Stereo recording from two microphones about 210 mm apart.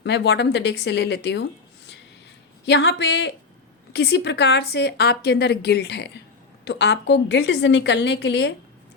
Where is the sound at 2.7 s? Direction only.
55° left (ahead or behind).